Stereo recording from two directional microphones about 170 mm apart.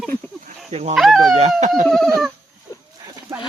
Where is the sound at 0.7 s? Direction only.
40° right (ahead or behind).